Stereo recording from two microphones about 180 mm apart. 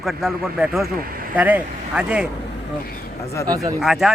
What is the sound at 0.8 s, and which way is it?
Speech, 55° right (ahead or behind).